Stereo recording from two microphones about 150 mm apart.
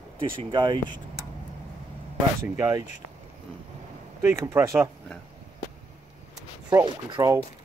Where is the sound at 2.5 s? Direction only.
20° right (ahead or behind).